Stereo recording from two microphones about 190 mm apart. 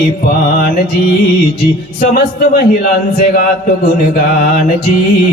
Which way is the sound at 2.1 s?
50° left (ahead or behind).